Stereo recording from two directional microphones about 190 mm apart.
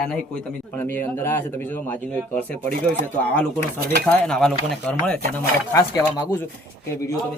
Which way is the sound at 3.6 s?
50° right (ahead or behind).